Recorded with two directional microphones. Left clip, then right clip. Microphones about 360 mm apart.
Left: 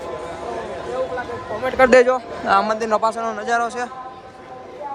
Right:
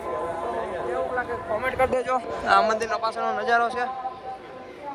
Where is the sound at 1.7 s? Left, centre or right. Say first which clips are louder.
Left 12 dB; left.